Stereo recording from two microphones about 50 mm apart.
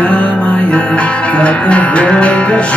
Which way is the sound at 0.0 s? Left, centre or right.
Left.